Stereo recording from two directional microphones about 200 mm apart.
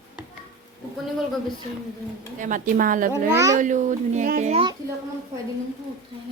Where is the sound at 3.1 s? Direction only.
15° right (ahead or behind).